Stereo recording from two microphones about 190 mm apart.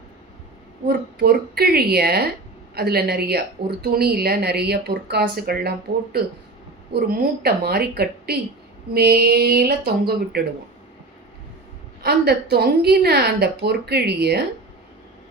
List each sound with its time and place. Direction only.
0.9 s a woman's voice: 55° right (ahead or behind)
7.1 s a woman's voice: 55° right (ahead or behind)
12.0 s a woman's voice: 55° right (ahead or behind)